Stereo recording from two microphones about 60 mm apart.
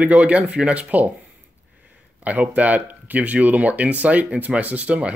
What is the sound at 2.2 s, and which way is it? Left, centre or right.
Speech, right.